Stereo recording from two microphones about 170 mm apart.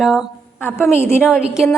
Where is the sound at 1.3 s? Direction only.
5° right (ahead or behind).